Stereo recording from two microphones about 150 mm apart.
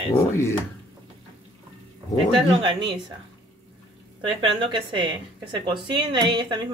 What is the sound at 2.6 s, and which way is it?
Speech, 30° right (ahead or behind).